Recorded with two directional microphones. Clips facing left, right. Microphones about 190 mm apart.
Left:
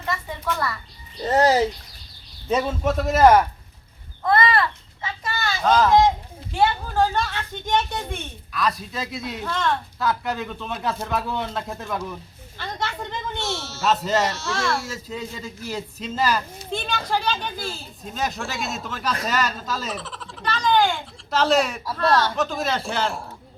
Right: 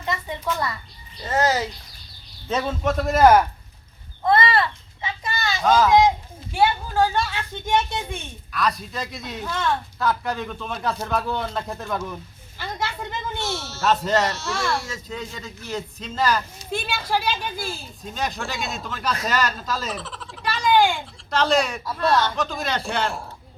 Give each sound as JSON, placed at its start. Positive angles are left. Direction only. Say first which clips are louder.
{"t": 0.0, "sound": "a sound", "louder": "right 1 dB", "side_deg": -20}
{"t": 1.2, "sound": "a child's voice", "louder": "left 4 dB", "side_deg": 35}
{"t": 2.5, "sound": "speech", "louder": "left 1 dB", "side_deg": 5}
{"t": 4.2, "sound": "children playing", "louder": "even", "side_deg": -25}
{"t": 5.6, "sound": "a child's voice", "louder": "even", "side_deg": -5}
{"t": 8.5, "sound": "speech", "louder": "even", "side_deg": 0}
{"t": 16.7, "sound": "a child's voice", "louder": "even", "side_deg": -10}
{"t": 18.0, "sound": "speech", "louder": "left 1 dB", "side_deg": 0}
{"t": 21.2, "sound": "speech", "louder": "left 1 dB", "side_deg": 5}
{"t": 21.9, "sound": "a child's voice", "louder": "left 1 dB", "side_deg": -10}
{"t": 22.2, "sound": "speech", "louder": "left 1 dB", "side_deg": 0}